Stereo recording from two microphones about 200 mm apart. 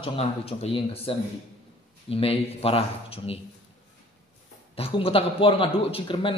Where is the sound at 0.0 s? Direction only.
30° left (ahead or behind).